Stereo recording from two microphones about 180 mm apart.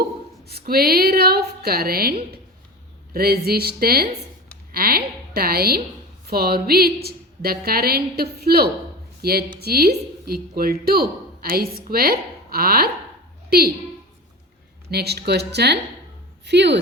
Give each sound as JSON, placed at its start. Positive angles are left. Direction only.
{"t": 0.4, "sound": "a woman's voice", "side_deg": -60}
{"t": 14.8, "sound": "a woman's voice", "side_deg": -65}